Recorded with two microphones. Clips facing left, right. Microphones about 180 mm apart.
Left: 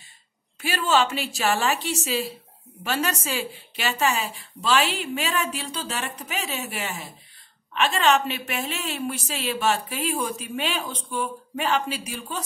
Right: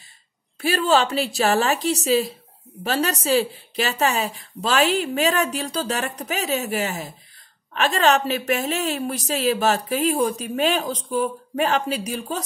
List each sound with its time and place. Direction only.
0.6 s a woman's voice: 35° right (ahead or behind)